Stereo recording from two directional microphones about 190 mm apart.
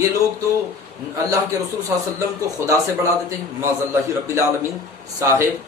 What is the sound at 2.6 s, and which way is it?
A man's voice, 15° right (ahead or behind).